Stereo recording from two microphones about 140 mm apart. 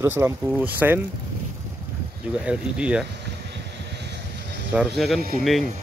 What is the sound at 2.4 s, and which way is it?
Speech, 10° right (ahead or behind).